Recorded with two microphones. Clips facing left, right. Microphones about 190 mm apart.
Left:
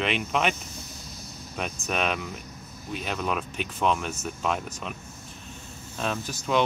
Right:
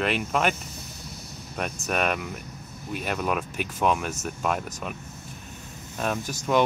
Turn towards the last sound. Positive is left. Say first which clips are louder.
# right 2 dB
turn(degrees=-10)  # may be behind; listen again after turning